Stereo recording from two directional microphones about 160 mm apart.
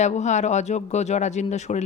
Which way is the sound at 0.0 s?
45° left (ahead or behind).